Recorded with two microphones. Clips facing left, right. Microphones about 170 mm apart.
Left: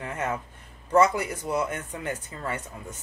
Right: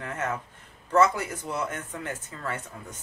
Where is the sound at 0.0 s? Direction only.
15° left (ahead or behind).